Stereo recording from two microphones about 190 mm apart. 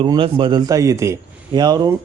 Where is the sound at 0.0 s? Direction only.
25° right (ahead or behind).